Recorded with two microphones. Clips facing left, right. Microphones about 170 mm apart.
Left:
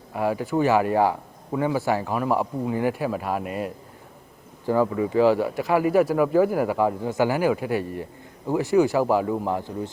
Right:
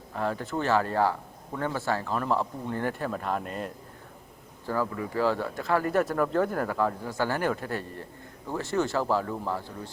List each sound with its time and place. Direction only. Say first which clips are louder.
0.1 s speech: left 6 dB; 10° left (ahead or behind)